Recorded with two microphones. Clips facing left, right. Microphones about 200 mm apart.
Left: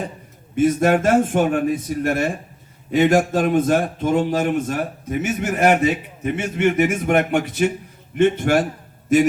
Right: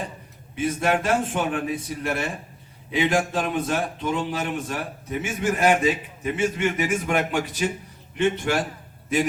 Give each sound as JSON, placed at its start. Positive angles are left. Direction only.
{"t": 0.5, "sound": "speech", "side_deg": 45}
{"t": 5.4, "sound": "a man's voice", "side_deg": 65}